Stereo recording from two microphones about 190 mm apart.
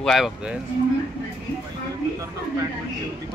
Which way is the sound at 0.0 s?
Centre (ahead or behind).